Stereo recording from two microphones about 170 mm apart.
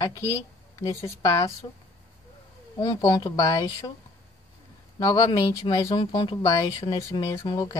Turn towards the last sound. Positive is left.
turn(degrees=20)  # may be behind; listen again after turning